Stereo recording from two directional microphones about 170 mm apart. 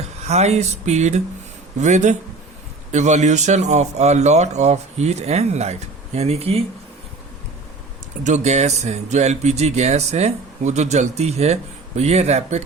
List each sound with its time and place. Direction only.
0.3 s a man's voice: 40° right (ahead or behind)
8.2 s a man's voice: 45° right (ahead or behind)